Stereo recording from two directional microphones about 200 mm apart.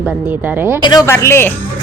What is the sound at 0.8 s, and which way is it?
Speech, 20° left (ahead or behind).